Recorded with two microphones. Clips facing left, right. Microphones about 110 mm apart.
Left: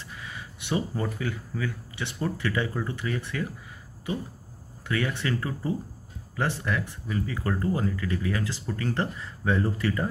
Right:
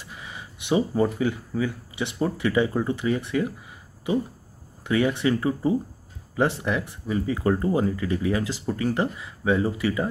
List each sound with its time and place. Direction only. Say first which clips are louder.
0.1 s a sound: right 2 dB; 20° right (ahead or behind)
1.5 s speech: right 6 dB; 15° right (ahead or behind)
4.8 s speech: right 7 dB; 20° right (ahead or behind)